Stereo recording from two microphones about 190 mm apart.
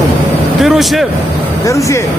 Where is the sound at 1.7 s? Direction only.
15° left (ahead or behind).